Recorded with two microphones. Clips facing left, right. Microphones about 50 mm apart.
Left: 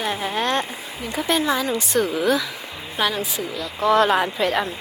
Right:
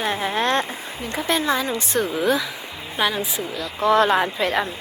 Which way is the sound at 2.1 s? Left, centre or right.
Centre.